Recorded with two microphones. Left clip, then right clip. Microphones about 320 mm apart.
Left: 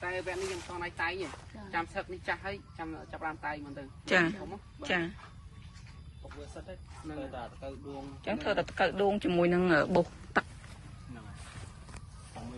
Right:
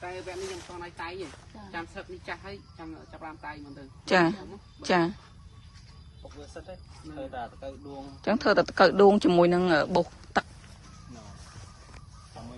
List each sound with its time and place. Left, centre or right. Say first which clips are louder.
0.0 s speech: left 2 dB; centre
8.3 s speech: right 8 dB; centre